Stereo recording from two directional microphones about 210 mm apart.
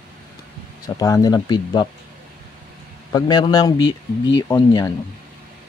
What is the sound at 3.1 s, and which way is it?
Speech, 20° left (ahead or behind).